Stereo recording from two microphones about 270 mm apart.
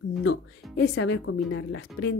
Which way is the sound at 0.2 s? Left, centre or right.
Left.